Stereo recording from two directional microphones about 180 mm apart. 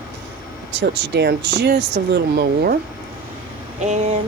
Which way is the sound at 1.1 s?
70° right (ahead or behind).